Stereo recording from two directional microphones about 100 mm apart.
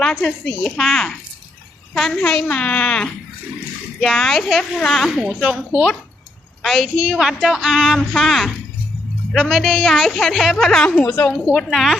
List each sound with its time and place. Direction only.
0.0 s a woman's voice: 5° left (ahead or behind)
10.8 s a woman's voice: 20° left (ahead or behind)
11.3 s a woman's voice: 5° left (ahead or behind)